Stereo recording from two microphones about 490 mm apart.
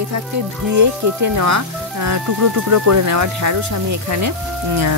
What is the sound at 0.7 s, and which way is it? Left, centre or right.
Speech, right.